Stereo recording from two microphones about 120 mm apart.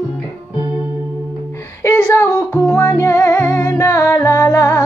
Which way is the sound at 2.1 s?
20° left (ahead or behind).